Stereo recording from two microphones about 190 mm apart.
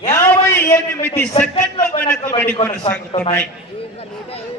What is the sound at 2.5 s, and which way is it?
Speech, 20° left (ahead or behind).